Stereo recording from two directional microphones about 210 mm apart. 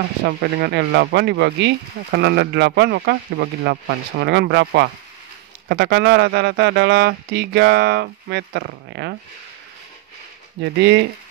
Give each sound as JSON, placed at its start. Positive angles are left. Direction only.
{"t": 0.2, "sound": "speech", "side_deg": -50}
{"t": 10.6, "sound": "speech", "side_deg": -55}